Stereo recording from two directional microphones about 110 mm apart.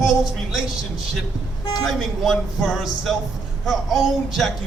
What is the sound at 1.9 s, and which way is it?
Speech, centre (ahead or behind).